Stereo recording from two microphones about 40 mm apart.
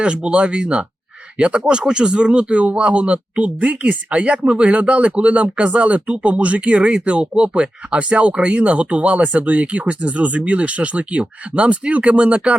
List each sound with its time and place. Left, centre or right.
0.0 s speech: right